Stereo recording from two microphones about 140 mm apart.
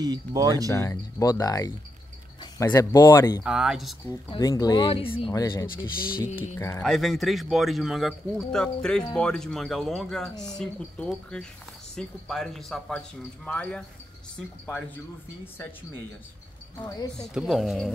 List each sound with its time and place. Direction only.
0.0 s speech: 30° right (ahead or behind)
0.7 s speech: 20° left (ahead or behind)
3.4 s speech: 5° right (ahead or behind)
4.4 s speech: 25° left (ahead or behind)
5.3 s speech: 25° left (ahead or behind)
5.9 s speech: 90° left
6.4 s speech: 20° left (ahead or behind)
6.8 s speech: centre (ahead or behind)
10.3 s speech: 30° left (ahead or behind)
10.6 s speech: 5° left (ahead or behind)
16.7 s speech: 25° left (ahead or behind)
17.2 s speech: 5° right (ahead or behind)